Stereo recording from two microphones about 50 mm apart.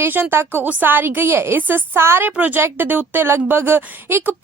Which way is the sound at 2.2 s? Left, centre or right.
Right.